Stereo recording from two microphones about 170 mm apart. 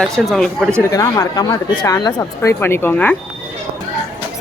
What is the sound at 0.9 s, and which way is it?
Speech, 20° left (ahead or behind).